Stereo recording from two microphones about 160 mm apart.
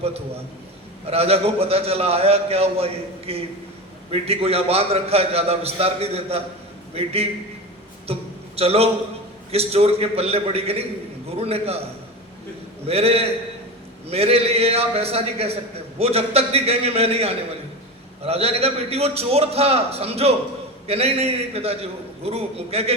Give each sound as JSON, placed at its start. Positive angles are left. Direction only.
{"t": 1.0, "sound": "a man's voice", "side_deg": -40}
{"t": 8.0, "sound": "a sound", "side_deg": -40}
{"t": 9.5, "sound": "a man's voice", "side_deg": -40}
{"t": 12.9, "sound": "a man's voice", "side_deg": -40}